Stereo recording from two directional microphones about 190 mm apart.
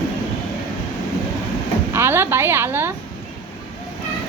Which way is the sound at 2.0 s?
10° right (ahead or behind).